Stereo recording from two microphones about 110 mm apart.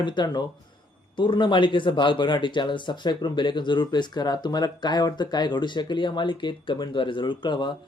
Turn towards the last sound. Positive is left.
turn(degrees=45)  # may be behind; listen again after turning